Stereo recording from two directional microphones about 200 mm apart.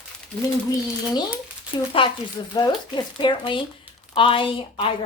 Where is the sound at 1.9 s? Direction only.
25° left (ahead or behind).